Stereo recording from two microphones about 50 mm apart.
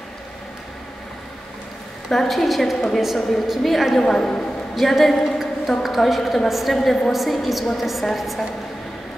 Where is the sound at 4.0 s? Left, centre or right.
Centre.